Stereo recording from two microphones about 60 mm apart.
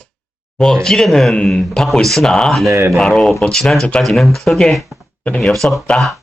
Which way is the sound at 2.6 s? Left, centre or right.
Right.